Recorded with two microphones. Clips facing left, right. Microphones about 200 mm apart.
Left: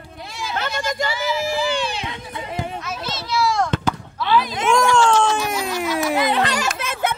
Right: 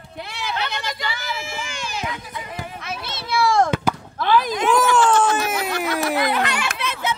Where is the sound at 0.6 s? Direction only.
45° left (ahead or behind); by 2.6 s 25° left (ahead or behind).